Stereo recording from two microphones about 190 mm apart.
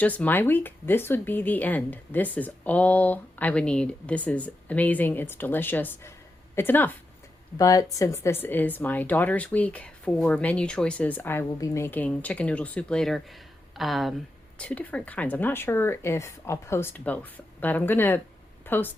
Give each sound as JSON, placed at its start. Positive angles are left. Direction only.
{"t": 0.0, "sound": "speech", "side_deg": 10}